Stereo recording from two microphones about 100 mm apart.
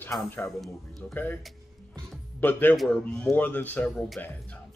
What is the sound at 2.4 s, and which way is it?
A man's voice, 20° left (ahead or behind).